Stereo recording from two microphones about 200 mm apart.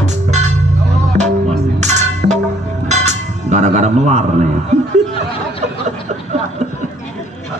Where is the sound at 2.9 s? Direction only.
35° right (ahead or behind).